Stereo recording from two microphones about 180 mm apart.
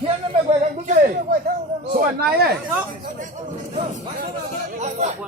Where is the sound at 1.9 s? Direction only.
60° right (ahead or behind).